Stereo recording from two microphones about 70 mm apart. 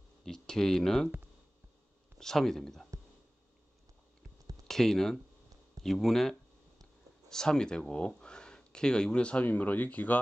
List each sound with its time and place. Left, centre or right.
0.2 s speech: centre
2.1 s speech: centre
4.6 s speech: centre
6.8 s a sound: centre
8.1 s speech: centre